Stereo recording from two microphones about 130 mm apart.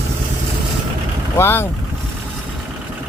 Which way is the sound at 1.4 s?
20° left (ahead or behind).